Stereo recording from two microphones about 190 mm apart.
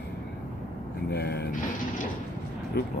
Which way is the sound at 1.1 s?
60° left (ahead or behind).